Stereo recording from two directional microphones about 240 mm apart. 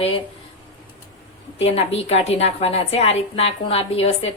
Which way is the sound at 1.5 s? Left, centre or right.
Left.